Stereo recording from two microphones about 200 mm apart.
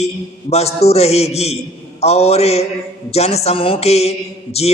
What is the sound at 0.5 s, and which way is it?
Speech, 30° left (ahead or behind).